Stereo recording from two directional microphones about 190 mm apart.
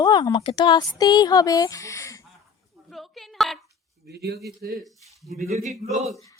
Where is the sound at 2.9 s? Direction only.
Centre (ahead or behind).